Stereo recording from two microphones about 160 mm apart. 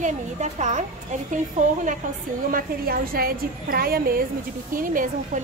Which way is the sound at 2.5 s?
65° right (ahead or behind).